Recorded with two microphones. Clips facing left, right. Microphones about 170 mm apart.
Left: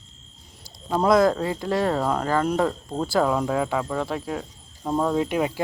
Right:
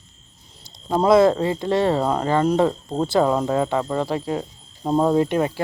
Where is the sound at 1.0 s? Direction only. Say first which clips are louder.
Right 4 dB; 5° right (ahead or behind).